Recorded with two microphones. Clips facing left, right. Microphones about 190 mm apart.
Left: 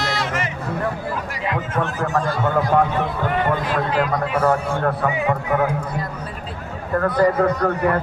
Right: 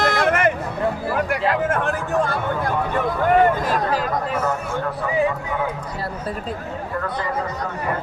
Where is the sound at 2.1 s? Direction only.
60° right (ahead or behind).